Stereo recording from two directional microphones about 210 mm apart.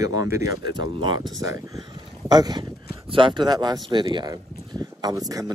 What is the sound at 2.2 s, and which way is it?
Speech, 20° right (ahead or behind).